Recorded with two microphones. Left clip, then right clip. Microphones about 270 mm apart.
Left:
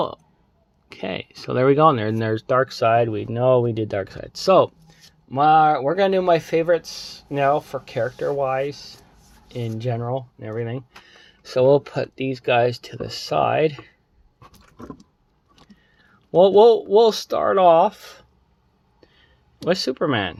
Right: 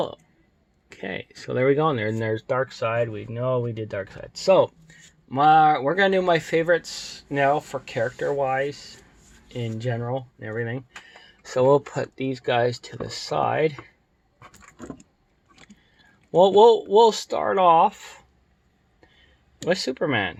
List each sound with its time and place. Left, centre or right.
0.9 s speech: centre
5.3 s speech: centre
16.3 s speech: centre
19.6 s speech: centre